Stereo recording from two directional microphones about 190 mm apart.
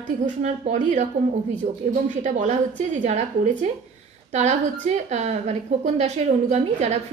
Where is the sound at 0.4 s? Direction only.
40° right (ahead or behind).